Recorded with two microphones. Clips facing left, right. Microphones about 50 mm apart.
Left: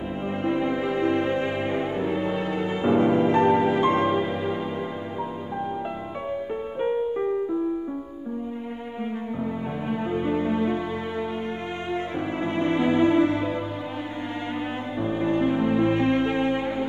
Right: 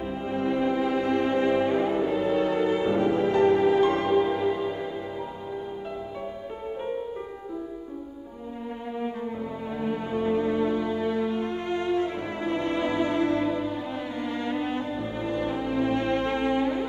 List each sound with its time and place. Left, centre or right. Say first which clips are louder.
0.3 s music: even; left
10.4 s music: left 1 dB; left
12.4 s music: left 3 dB; left
15.2 s music: left 6 dB; left